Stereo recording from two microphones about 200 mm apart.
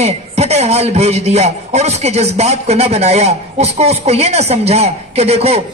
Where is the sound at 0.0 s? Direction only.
30° right (ahead or behind).